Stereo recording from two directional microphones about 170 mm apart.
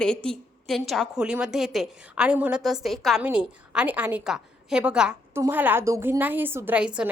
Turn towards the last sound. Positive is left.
turn(degrees=-5)  # may be behind; listen again after turning